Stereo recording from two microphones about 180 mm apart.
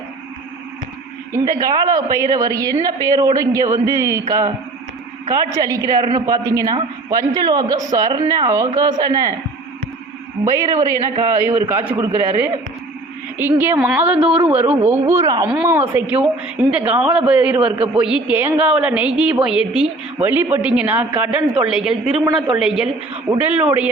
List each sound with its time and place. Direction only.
1.5 s speech: 20° right (ahead or behind)
10.4 s a man's voice: 20° right (ahead or behind)
17.6 s speech: 30° right (ahead or behind)
18.0 s a man's voice: 5° right (ahead or behind)